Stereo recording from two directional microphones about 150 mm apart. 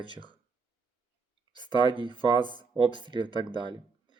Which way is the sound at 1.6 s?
35° right (ahead or behind).